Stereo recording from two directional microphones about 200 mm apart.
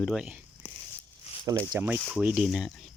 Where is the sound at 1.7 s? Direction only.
10° right (ahead or behind).